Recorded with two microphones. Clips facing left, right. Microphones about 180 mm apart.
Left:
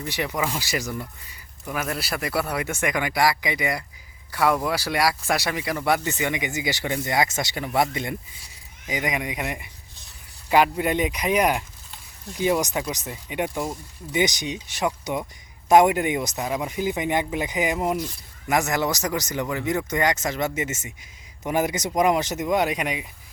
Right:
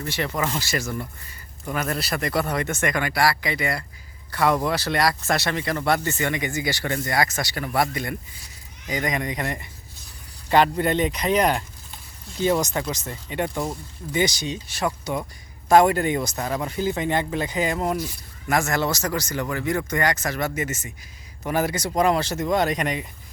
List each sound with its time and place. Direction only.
0.0 s speech: 15° left (ahead or behind)